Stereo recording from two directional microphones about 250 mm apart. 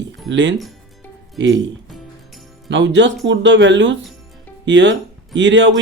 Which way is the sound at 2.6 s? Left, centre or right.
Right.